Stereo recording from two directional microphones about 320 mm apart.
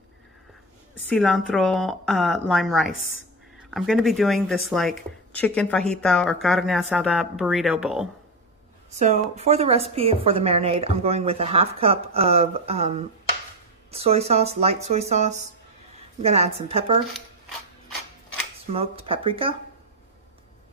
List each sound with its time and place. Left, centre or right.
1.1 s speech: centre
8.9 s a woman's voice: right
18.7 s speech: centre